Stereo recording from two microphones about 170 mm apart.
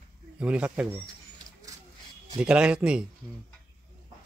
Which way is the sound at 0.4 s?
5° right (ahead or behind).